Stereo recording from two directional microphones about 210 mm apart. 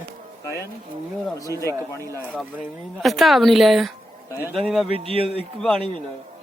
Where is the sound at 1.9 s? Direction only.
15° left (ahead or behind).